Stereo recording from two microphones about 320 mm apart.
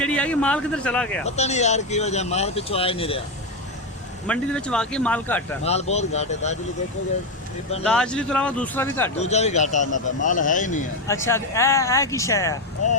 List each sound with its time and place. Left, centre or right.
0.0 s speech: centre
1.4 s speech: left
4.3 s speech: centre
5.6 s speech: centre
7.9 s speech: centre
9.1 s speech: left
11.1 s speech: centre